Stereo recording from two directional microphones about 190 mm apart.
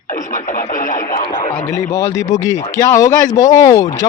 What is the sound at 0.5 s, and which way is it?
Speech, 45° left (ahead or behind).